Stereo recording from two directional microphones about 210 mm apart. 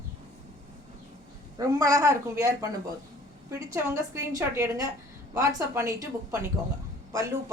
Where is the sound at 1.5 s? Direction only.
15° right (ahead or behind).